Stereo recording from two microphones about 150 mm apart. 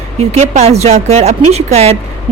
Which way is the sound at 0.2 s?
45° right (ahead or behind).